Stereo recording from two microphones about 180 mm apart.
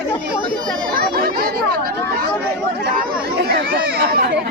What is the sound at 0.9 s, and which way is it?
Chatter, 55° right (ahead or behind).